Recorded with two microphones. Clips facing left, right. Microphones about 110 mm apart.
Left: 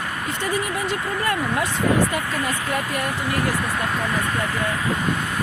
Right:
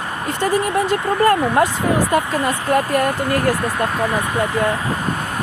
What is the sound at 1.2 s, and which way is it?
Speech, 50° right (ahead or behind).